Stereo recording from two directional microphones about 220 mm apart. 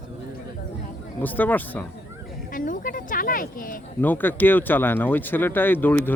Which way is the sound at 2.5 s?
40° left (ahead or behind).